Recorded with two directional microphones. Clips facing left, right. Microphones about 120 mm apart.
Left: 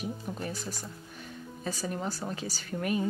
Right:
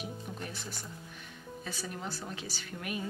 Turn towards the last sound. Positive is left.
turn(degrees=40)  # may be behind; listen again after turning